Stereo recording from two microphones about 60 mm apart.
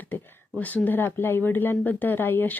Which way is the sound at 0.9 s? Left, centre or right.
Left.